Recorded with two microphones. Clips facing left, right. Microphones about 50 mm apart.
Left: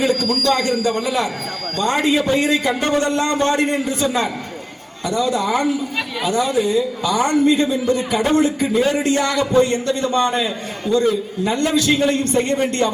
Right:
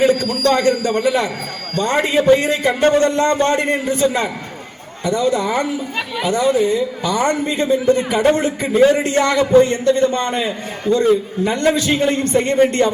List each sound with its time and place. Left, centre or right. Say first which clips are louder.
0.0 s a man's voice: right 3 dB; right